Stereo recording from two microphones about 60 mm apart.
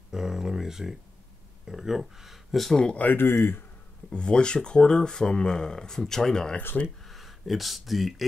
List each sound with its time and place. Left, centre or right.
0.1 s speech: centre
3.0 s speech: left
4.1 s speech: centre
6.7 s speech: left
7.1 s speech: centre